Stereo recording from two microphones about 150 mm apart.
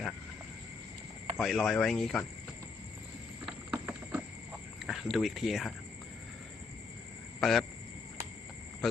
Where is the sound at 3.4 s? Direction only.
5° right (ahead or behind).